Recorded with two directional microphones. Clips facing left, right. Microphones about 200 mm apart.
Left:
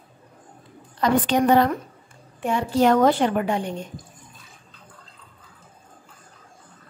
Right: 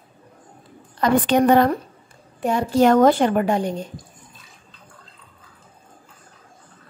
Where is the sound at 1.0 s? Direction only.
55° right (ahead or behind).